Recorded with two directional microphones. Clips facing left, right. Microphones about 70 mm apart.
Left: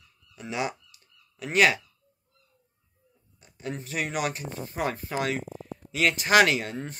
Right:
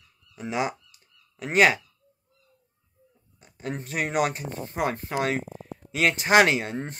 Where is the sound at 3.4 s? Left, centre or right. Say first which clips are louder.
Right 2 dB; right.